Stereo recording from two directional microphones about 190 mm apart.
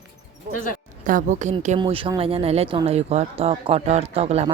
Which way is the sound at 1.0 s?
45° right (ahead or behind).